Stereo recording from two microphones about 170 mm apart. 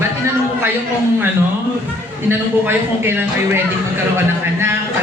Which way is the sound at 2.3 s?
15° right (ahead or behind).